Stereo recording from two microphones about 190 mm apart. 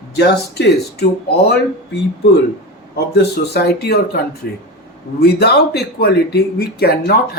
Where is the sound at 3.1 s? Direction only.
60° left (ahead or behind).